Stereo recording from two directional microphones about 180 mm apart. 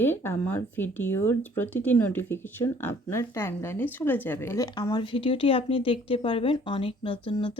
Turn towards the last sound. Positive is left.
turn(degrees=30)  # may be behind; listen again after turning